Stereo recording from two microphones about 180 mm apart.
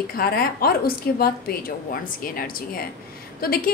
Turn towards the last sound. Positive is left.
turn(degrees=55)  # may be behind; listen again after turning